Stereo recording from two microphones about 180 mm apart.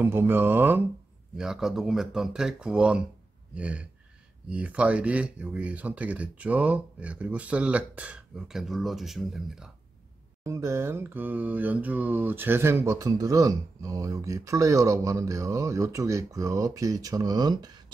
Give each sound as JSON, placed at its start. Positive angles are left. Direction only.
{"t": 0.0, "sound": "mantra", "side_deg": -10}
{"t": 1.3, "sound": "speech", "side_deg": -5}
{"t": 3.5, "sound": "mantra", "side_deg": -5}
{"t": 10.4, "sound": "mantra", "side_deg": -15}